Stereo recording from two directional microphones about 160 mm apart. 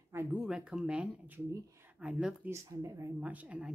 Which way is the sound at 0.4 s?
5° right (ahead or behind).